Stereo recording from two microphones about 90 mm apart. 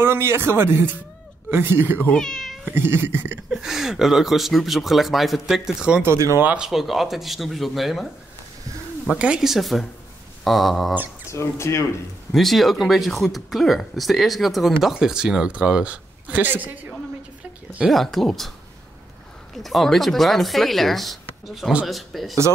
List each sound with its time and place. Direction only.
0.0 s speech: 30° right (ahead or behind)
2.1 s speech: 5° left (ahead or behind)
2.6 s speech: 25° right (ahead or behind)
3.4 s speech: 5° right (ahead or behind)
6.0 s speech: 30° right (ahead or behind)
6.4 s speech: 10° right (ahead or behind)
9.1 s speech: 10° right (ahead or behind)
11.2 s speech: 30° left (ahead or behind)
12.3 s speech: centre (ahead or behind); by 16.7 s 20° right (ahead or behind)
17.8 s speech: centre (ahead or behind)
19.5 s speech: centre (ahead or behind)